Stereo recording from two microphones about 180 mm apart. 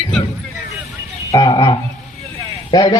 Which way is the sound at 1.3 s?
25° left (ahead or behind).